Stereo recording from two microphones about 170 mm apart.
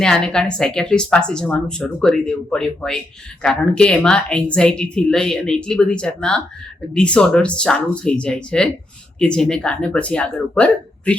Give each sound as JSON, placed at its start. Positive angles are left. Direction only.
{"t": 0.0, "sound": "speech", "side_deg": 5}